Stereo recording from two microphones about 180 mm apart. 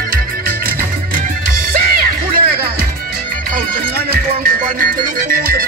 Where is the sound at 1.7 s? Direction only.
55° right (ahead or behind).